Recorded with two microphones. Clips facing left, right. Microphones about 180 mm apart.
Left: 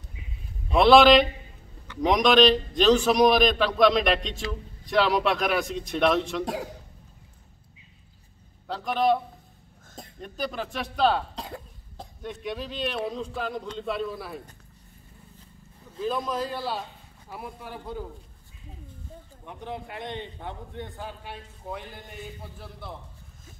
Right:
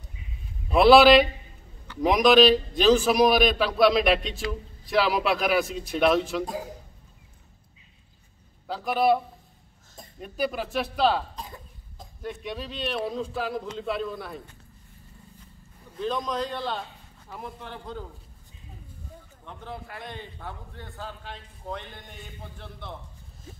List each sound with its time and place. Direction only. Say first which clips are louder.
0.7 s a man's voice: right 1 dB; 5° right (ahead or behind)
6.4 s a man's voice: left 2 dB; 75° left (ahead or behind)
8.6 s a man's voice: right 1 dB; 5° right (ahead or behind)
10.2 s a man's voice: right 3 dB; 10° right (ahead or behind)
11.3 s cough: left 3 dB; 70° left (ahead or behind)
12.2 s a man's voice: left 1 dB; centre (ahead or behind)
16.0 s a man's voice: even; 5° left (ahead or behind)
19.4 s a man's voice: left 3 dB; 15° left (ahead or behind)